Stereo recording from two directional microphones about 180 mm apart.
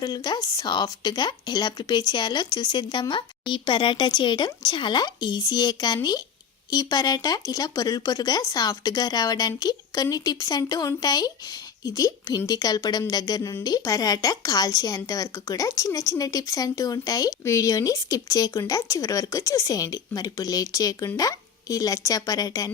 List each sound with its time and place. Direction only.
0.0 s a woman's voice: 20° left (ahead or behind)